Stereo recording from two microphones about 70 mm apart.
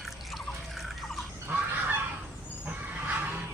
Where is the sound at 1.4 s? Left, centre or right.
Right.